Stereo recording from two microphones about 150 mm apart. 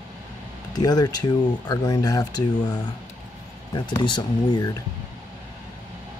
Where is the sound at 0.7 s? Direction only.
25° left (ahead or behind).